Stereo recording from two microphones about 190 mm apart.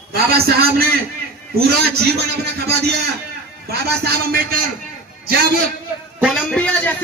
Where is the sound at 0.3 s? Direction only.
55° right (ahead or behind).